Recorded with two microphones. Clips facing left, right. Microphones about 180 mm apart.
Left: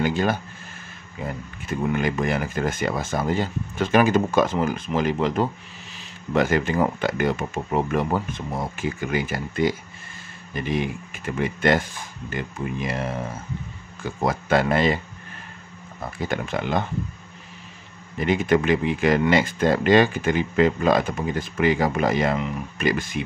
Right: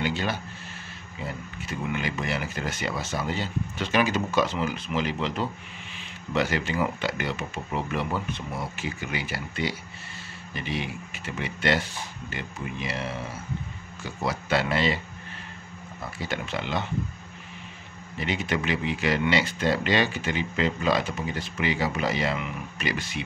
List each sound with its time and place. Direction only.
0.0 s speech: 50° left (ahead or behind)
16.2 s speech: 50° left (ahead or behind)
18.1 s speech: 50° left (ahead or behind)